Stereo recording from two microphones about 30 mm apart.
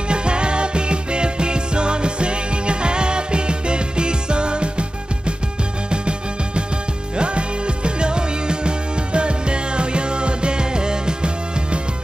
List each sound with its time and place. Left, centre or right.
0.1 s music: right